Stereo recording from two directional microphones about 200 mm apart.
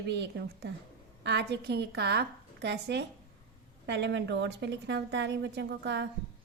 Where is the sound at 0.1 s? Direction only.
60° right (ahead or behind).